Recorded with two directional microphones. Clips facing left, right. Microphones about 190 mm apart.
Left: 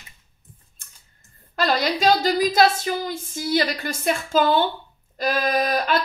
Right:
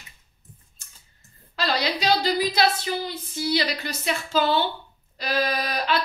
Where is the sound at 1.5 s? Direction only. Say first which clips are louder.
Left 4 dB; 50° left (ahead or behind).